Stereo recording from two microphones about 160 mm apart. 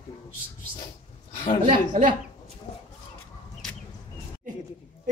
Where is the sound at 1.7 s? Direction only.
55° right (ahead or behind).